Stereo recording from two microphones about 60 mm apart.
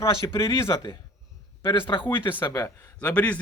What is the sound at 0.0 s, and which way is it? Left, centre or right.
Speech, left.